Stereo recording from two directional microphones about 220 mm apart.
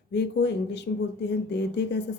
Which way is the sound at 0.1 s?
50° left (ahead or behind).